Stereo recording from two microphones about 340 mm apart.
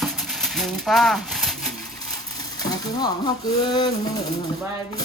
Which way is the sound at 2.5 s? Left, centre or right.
Centre.